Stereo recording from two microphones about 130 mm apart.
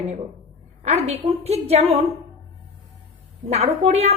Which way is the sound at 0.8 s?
55° right (ahead or behind).